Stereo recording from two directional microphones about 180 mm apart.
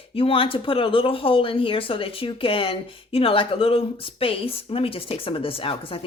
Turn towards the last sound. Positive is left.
turn(degrees=30)  # may be behind; listen again after turning